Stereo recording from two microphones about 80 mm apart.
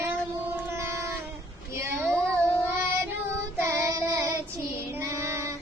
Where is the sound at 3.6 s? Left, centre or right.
Right.